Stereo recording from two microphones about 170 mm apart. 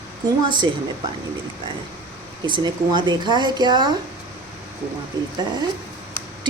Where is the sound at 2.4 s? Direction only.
25° right (ahead or behind).